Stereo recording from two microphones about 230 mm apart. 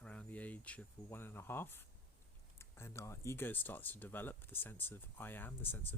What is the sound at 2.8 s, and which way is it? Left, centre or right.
Speech, centre.